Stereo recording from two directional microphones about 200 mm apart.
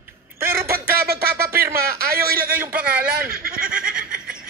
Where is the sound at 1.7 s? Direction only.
50° right (ahead or behind).